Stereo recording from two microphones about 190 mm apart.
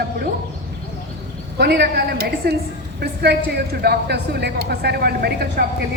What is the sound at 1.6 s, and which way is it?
A woman's voice, 60° right (ahead or behind).